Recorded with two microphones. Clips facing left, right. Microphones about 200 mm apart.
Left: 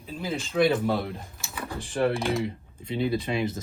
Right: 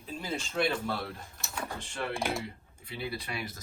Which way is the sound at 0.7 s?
15° left (ahead or behind).